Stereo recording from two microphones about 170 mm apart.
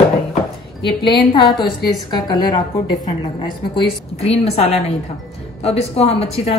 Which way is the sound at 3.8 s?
35° left (ahead or behind).